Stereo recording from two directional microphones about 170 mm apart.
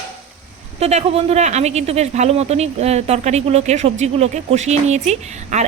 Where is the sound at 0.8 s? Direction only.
40° right (ahead or behind).